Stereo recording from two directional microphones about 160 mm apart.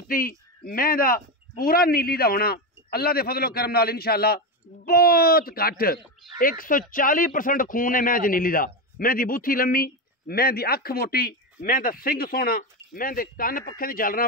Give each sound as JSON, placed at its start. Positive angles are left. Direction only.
{"t": 0.1, "sound": "a man's voice", "side_deg": 65}